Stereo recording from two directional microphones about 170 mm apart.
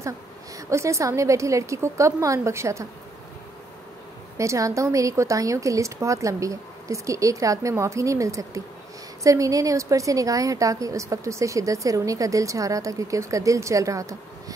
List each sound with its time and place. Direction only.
0.6 s a woman's voice: 15° right (ahead or behind)
4.4 s a woman's voice: 20° right (ahead or behind)